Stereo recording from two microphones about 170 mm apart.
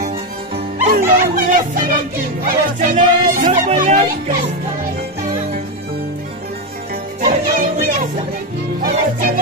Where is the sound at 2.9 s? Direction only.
50° right (ahead or behind).